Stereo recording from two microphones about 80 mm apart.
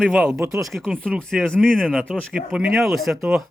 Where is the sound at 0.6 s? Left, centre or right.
Centre.